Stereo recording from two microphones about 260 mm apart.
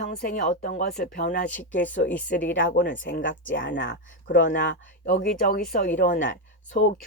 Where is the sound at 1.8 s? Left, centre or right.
Centre.